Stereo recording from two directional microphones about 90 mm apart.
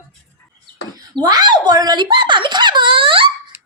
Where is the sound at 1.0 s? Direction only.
50° right (ahead or behind); by 3.5 s 75° right (ahead or behind).